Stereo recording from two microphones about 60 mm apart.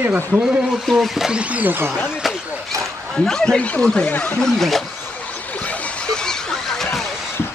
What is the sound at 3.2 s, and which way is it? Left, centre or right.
Speech, centre.